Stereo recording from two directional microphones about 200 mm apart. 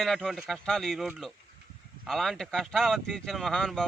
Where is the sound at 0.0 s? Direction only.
Centre (ahead or behind).